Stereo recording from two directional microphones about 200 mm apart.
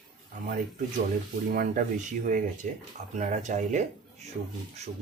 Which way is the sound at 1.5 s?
40° right (ahead or behind).